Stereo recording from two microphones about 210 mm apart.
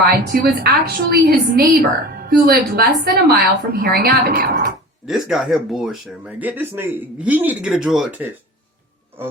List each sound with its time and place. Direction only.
0.0 s a woman's voice: 50° right (ahead or behind)
5.0 s speech: centre (ahead or behind)